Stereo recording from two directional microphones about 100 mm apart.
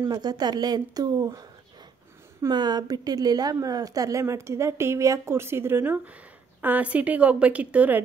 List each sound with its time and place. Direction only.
0.0 s speech: 45° right (ahead or behind)
2.5 s a woman's voice: 45° right (ahead or behind); by 8.0 s 15° right (ahead or behind)